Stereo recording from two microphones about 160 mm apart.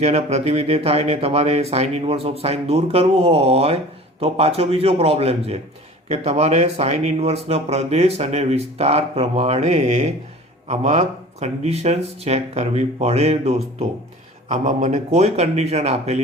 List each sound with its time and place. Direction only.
0.0 s speech: 40° right (ahead or behind)